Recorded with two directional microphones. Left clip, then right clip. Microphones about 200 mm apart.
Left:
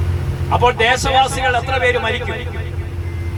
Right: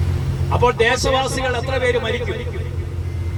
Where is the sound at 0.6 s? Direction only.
45° left (ahead or behind).